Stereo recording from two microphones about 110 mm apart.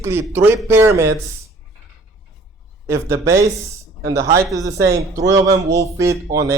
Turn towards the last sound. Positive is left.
turn(degrees=-30)  # may be behind; listen again after turning